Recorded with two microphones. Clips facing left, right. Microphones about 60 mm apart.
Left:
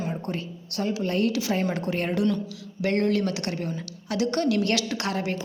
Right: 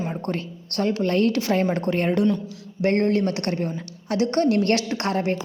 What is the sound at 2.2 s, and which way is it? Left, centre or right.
Speech, right.